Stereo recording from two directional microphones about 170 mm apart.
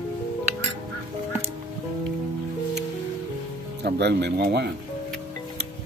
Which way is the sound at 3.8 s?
75° right (ahead or behind).